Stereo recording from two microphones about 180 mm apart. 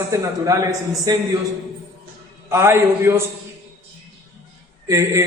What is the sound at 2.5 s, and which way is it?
Speech, 15° right (ahead or behind).